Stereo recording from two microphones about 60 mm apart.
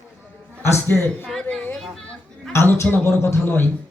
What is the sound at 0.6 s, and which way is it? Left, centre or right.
Speech, left.